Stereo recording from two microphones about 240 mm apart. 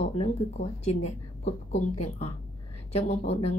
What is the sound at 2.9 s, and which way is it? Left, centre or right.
Speech, left.